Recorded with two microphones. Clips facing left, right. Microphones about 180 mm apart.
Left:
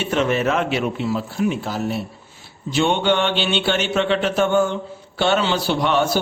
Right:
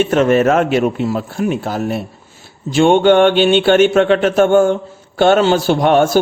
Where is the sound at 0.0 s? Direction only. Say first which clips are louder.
Right 8 dB; 50° right (ahead or behind).